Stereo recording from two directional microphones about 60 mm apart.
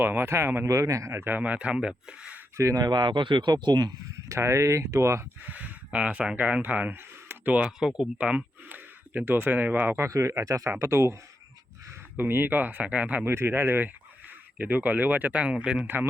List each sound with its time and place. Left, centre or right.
0.0 s speech: right
0.7 s speech: right
1.1 s speech: right
1.4 s speech: right
2.6 s speech: right
4.3 s speech: right
5.4 s speech: right
7.8 s speech: centre
8.2 s speech: right
10.1 s speech: right
12.1 s speech: right
13.2 s speech: right; by 15.9 s centre